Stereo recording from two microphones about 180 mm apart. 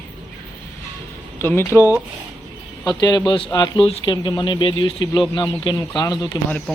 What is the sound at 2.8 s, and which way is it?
Speech, 25° left (ahead or behind).